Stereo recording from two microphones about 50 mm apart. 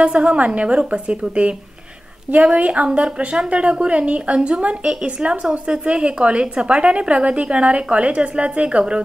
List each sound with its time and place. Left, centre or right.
0.0 s a woman's voice: right